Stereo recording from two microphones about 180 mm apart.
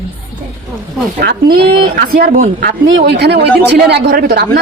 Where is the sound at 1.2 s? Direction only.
60° right (ahead or behind).